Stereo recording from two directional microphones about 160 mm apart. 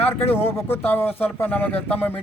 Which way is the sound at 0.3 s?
15° left (ahead or behind).